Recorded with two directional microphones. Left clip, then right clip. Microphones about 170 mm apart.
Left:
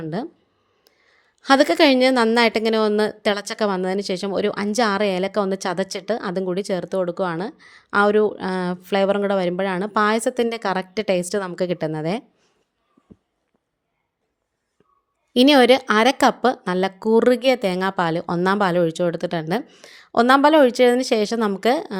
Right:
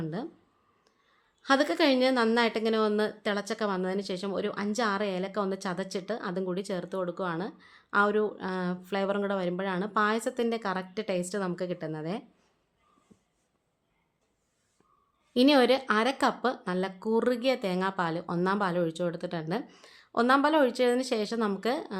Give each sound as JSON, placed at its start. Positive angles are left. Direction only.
{"t": 0.9, "sound": "a woman's voice", "side_deg": 45}
{"t": 15.3, "sound": "a woman's voice", "side_deg": 40}